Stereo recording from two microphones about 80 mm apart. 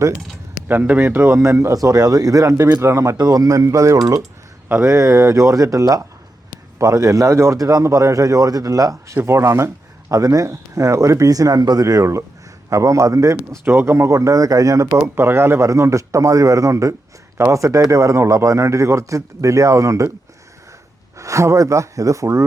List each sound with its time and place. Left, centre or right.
0.7 s speech: right
1.4 s a man's voice: right
3.2 s a man's voice: right
9.1 s a man's voice: right
13.7 s speech: right
15.0 s speech: right
21.2 s speech: right